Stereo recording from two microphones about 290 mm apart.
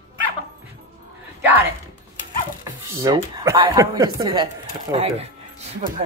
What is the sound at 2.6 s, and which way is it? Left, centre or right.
Speech, centre.